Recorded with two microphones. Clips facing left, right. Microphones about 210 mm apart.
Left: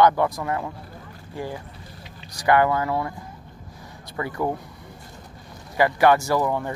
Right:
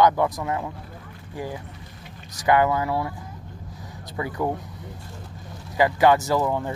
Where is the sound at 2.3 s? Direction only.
20° right (ahead or behind).